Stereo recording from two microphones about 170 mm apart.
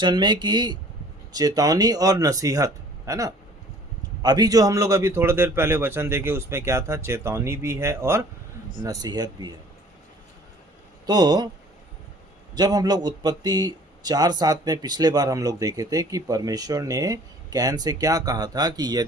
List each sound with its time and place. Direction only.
0.0 s a man's voice: 25° right (ahead or behind)
11.0 s speech: 25° right (ahead or behind)
12.5 s a man's voice: 25° right (ahead or behind)